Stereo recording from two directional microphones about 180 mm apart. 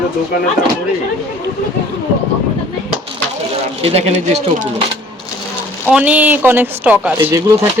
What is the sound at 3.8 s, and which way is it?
Speech, 35° right (ahead or behind).